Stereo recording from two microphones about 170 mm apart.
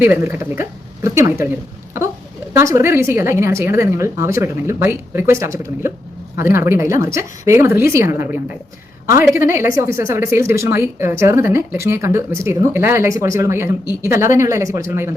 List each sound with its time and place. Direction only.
0.0 s a woman's voice: 15° right (ahead or behind)